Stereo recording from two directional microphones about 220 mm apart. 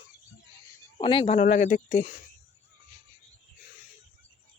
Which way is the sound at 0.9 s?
25° left (ahead or behind).